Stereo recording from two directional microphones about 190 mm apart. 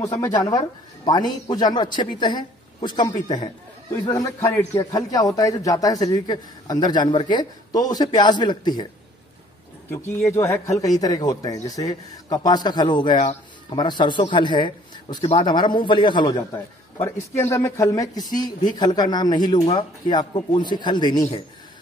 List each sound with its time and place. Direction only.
0.0 s a man's voice: 15° left (ahead or behind)
9.8 s a man's voice: 10° left (ahead or behind)
16.5 s a man's voice: 15° left (ahead or behind)